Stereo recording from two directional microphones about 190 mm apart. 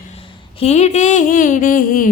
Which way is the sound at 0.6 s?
35° left (ahead or behind).